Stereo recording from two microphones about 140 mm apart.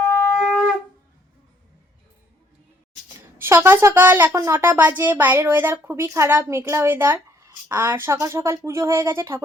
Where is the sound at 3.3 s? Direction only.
15° right (ahead or behind).